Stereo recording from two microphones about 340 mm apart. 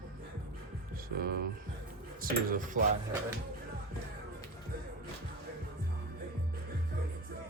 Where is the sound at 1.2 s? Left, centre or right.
Right.